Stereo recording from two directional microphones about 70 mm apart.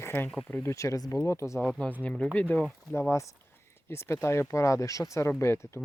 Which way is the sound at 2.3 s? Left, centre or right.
Left.